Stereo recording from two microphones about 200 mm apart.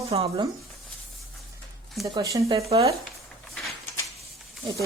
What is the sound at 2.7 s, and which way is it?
Speech, 30° right (ahead or behind).